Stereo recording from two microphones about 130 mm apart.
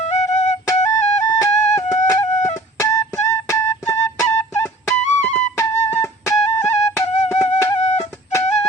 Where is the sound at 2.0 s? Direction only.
20° left (ahead or behind).